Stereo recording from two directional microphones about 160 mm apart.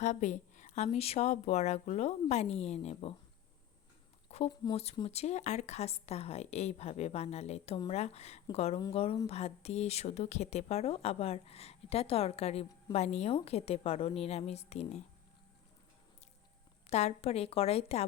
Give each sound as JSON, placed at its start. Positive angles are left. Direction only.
{"t": 0.0, "sound": "a woman's voice", "side_deg": 45}
{"t": 4.4, "sound": "speech", "side_deg": 30}
{"t": 4.8, "sound": "a woman's voice", "side_deg": 40}
{"t": 16.9, "sound": "speech", "side_deg": 45}